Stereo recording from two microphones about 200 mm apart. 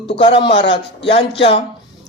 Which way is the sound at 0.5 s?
60° left (ahead or behind).